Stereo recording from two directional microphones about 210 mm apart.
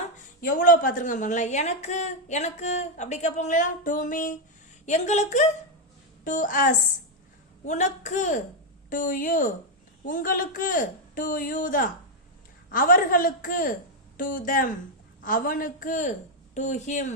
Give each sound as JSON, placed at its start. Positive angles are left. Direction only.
{"t": 0.4, "sound": "a woman's voice", "side_deg": 40}